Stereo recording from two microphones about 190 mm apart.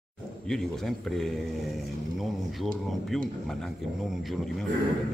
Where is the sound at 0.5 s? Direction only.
Centre (ahead or behind).